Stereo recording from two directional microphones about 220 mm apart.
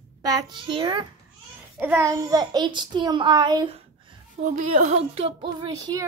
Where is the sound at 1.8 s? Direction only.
10° right (ahead or behind).